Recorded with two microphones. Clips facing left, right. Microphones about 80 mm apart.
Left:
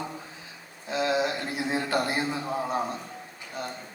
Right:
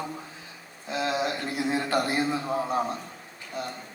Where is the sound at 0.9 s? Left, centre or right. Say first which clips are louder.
Left 2 dB; left.